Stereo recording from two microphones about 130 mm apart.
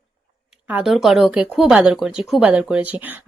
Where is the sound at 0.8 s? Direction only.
Centre (ahead or behind).